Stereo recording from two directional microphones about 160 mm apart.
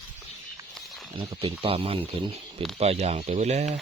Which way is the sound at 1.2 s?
25° right (ahead or behind).